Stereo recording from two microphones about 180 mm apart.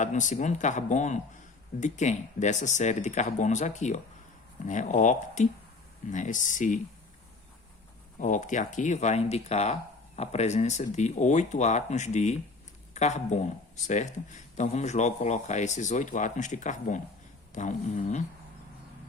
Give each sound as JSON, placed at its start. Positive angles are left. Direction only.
{"t": 0.0, "sound": "speech", "side_deg": 45}
{"t": 8.2, "sound": "speech", "side_deg": 45}